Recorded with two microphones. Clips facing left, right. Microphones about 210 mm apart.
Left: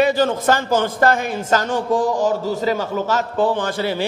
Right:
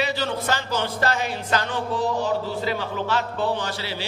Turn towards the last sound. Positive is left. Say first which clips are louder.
# left 8 dB
turn(degrees=50)  # may be behind; listen again after turning